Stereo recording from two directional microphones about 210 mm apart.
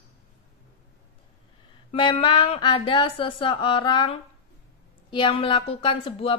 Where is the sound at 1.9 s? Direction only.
25° left (ahead or behind).